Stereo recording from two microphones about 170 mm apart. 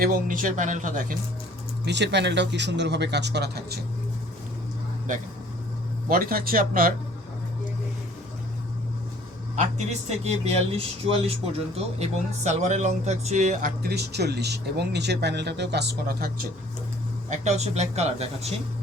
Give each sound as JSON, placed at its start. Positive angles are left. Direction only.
{"t": 0.0, "sound": "speech", "side_deg": -55}
{"t": 1.8, "sound": "speech", "side_deg": -85}
{"t": 6.1, "sound": "speech", "side_deg": -60}
{"t": 10.2, "sound": "speech", "side_deg": -40}
{"t": 17.2, "sound": "speech", "side_deg": -45}